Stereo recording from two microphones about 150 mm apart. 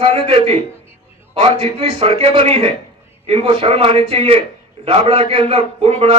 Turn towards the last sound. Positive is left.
turn(degrees=-45)  # may be behind; listen again after turning